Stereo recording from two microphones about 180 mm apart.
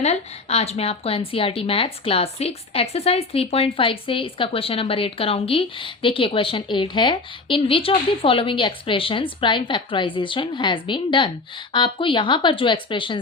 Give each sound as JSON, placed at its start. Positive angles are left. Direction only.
{"t": 0.0, "sound": "a woman's voice", "side_deg": 35}